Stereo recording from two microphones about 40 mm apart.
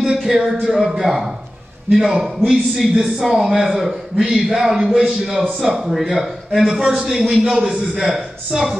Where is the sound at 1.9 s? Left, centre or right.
Centre.